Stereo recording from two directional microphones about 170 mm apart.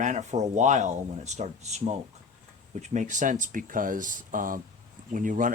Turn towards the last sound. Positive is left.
turn(degrees=-50)  # may be behind; listen again after turning